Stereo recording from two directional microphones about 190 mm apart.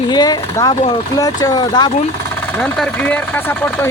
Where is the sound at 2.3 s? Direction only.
10° left (ahead or behind).